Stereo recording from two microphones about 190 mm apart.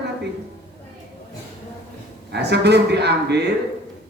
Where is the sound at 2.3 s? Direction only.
60° right (ahead or behind).